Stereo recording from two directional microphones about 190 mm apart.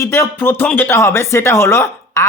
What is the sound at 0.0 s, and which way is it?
Speech, 15° left (ahead or behind).